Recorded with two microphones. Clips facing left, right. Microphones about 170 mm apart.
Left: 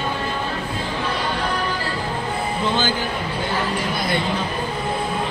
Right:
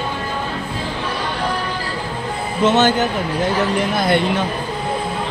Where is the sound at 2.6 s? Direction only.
75° right (ahead or behind).